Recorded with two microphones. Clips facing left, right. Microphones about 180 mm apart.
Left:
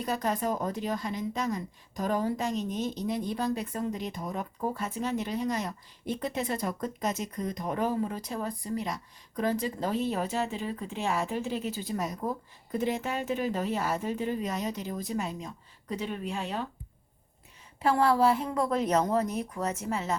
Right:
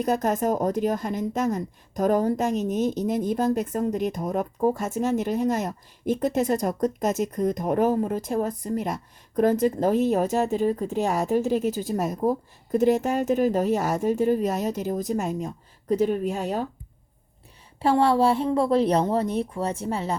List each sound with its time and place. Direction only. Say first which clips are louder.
0.0 s speech: right 7 dB; 45° right (ahead or behind)
17.7 s a woman's voice: right 4 dB; 30° right (ahead or behind)